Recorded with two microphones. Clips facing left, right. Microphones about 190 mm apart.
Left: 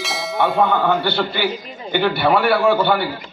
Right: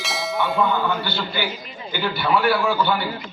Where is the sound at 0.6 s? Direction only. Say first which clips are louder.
Left 6 dB; 65° left (ahead or behind).